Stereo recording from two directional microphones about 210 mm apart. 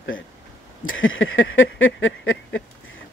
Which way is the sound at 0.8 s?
70° left (ahead or behind).